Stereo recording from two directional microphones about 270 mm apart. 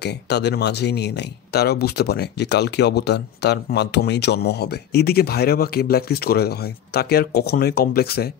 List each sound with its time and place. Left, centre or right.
0.0 s speech: left